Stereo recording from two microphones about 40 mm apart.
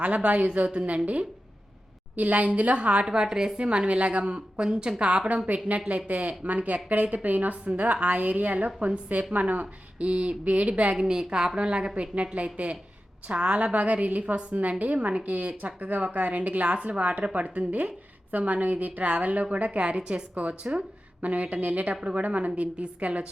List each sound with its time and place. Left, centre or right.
0.0 s a woman's voice: right
3.2 s a woman's voice: centre
3.6 s a woman's voice: right
6.1 s a woman's voice: right
10.9 s a woman's voice: centre; by 23.2 s right